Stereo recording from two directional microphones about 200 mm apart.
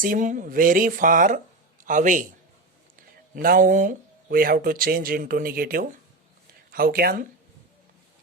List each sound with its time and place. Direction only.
0.0 s a man's voice: 40° right (ahead or behind)
3.4 s speech: 45° right (ahead or behind)